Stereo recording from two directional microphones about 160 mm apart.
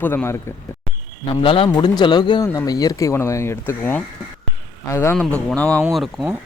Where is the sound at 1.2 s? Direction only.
35° left (ahead or behind).